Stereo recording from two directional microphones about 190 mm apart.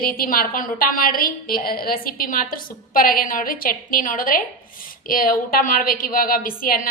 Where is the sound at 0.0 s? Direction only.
50° left (ahead or behind).